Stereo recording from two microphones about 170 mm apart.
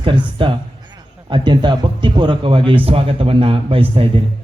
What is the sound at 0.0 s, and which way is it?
Speech, 30° right (ahead or behind).